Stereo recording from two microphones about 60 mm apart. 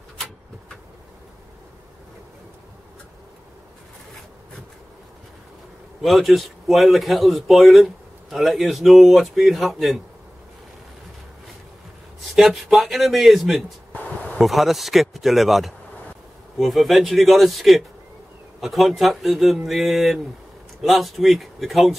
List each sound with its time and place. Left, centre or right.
6.0 s a man's voice: centre
12.4 s a man's voice: centre
13.9 s a sound: left
14.4 s a man's voice: centre